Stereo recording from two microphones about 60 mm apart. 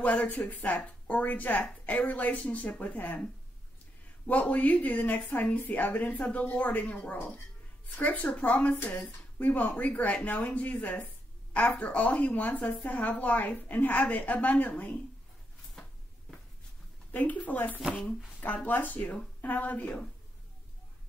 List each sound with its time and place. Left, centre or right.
0.0 s a woman's voice: left
4.3 s a woman's voice: left
17.1 s a woman's voice: left